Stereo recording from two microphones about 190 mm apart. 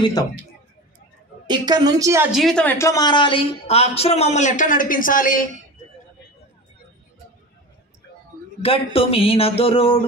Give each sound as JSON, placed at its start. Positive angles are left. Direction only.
{"t": 0.0, "sound": "speech", "side_deg": 20}
{"t": 1.5, "sound": "a woman's voice", "side_deg": -20}
{"t": 2.3, "sound": "speech", "side_deg": 5}
{"t": 8.6, "sound": "speech", "side_deg": 30}